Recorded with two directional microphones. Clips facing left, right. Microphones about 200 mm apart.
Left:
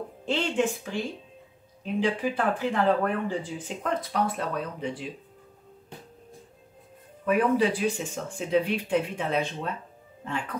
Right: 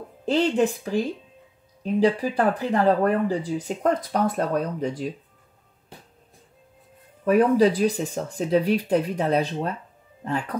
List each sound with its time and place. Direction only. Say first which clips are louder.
0.2 s speech: right 6 dB; 40° right (ahead or behind)
7.2 s speech: right 5 dB; 40° right (ahead or behind)